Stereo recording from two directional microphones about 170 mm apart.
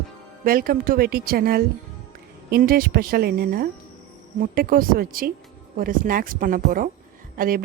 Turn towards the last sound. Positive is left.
turn(degrees=-55)  # may be behind; listen again after turning